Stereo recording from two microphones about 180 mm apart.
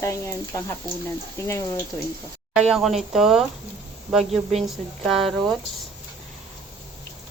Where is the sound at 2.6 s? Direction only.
Centre (ahead or behind).